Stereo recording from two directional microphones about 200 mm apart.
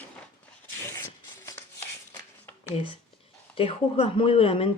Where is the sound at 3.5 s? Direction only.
25° left (ahead or behind).